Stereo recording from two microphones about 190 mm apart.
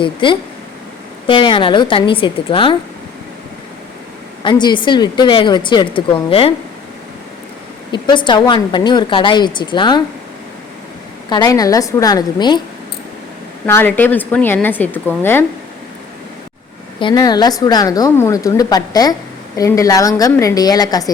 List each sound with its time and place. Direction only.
0.0 s a woman's voice: 25° left (ahead or behind)
4.4 s a woman's voice: 25° left (ahead or behind)
7.9 s a woman's voice: 25° left (ahead or behind)
11.3 s a woman's voice: 20° left (ahead or behind)
13.7 s a woman's voice: 10° left (ahead or behind)
17.0 s a woman's voice: 20° left (ahead or behind)